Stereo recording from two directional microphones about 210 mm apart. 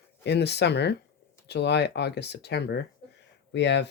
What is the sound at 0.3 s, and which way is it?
Speech, 55° left (ahead or behind).